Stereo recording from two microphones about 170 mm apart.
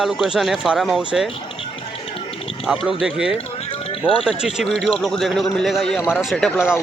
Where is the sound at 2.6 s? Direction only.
Centre (ahead or behind).